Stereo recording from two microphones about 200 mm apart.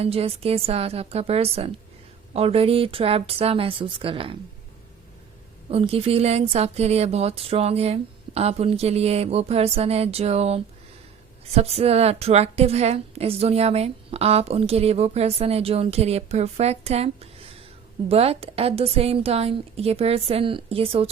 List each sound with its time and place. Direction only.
0.0 s a woman's voice: 30° right (ahead or behind)
5.7 s a woman's voice: 30° right (ahead or behind)